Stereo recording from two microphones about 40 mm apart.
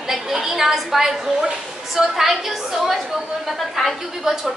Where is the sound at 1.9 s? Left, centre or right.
Centre.